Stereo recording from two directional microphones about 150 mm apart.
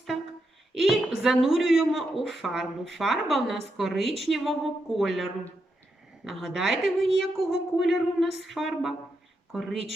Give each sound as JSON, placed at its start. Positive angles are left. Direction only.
{"t": 0.7, "sound": "a woman's voice", "side_deg": 0}